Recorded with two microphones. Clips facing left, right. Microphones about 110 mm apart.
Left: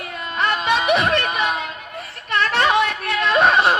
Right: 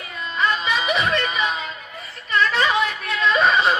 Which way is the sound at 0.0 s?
60° left (ahead or behind).